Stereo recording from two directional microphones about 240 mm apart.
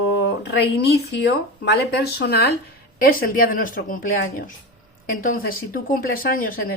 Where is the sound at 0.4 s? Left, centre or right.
Left.